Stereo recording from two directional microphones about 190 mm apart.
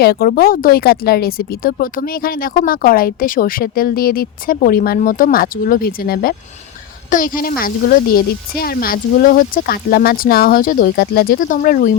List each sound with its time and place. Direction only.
0.0 s speech: 55° left (ahead or behind)